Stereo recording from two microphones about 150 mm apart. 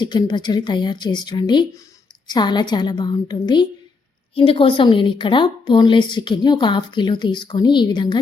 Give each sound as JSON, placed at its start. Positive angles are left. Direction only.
{"t": 0.0, "sound": "a woman's voice", "side_deg": 30}